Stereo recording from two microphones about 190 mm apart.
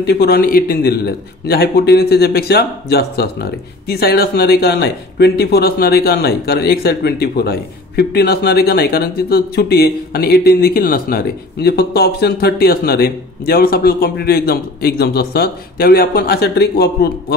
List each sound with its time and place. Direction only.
0.0 s a man's voice: 60° left (ahead or behind)